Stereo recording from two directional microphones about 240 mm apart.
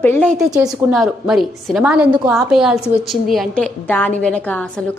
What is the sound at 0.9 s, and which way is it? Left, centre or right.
A woman's voice, centre.